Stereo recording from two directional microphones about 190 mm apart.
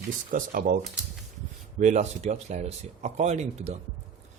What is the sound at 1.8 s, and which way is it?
Speech, 35° right (ahead or behind).